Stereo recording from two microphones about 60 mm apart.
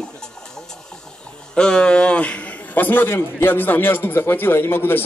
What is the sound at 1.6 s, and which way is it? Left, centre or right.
A man's voice, centre.